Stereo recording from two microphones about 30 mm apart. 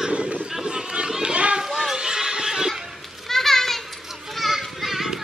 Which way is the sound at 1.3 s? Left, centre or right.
Right.